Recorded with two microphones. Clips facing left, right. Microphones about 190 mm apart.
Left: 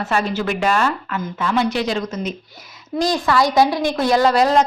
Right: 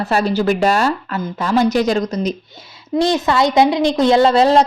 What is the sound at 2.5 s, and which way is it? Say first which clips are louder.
A woman's voice: right 5 dB; 25° right (ahead or behind).